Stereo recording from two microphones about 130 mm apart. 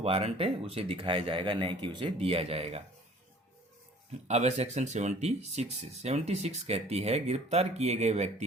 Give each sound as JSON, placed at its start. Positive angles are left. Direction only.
{"t": 0.0, "sound": "speech", "side_deg": -50}
{"t": 4.3, "sound": "speech", "side_deg": -55}